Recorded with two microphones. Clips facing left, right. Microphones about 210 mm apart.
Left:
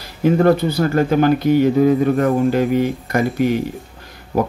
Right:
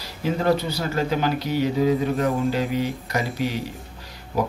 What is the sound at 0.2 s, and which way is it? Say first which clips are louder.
Speech: left 8 dB; 55° left (ahead or behind).